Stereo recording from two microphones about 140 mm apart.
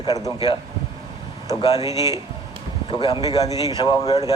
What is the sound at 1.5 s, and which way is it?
Speech, 25° left (ahead or behind).